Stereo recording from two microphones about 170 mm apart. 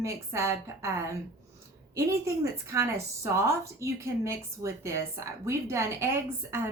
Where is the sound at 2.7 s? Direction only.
15° right (ahead or behind).